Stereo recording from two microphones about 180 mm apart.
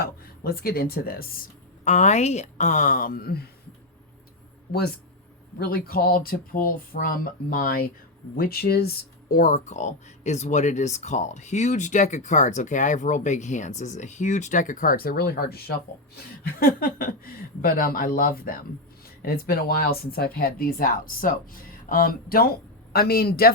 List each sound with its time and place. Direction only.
0.0 s speech: 55° left (ahead or behind)
5.5 s speech: 55° left (ahead or behind)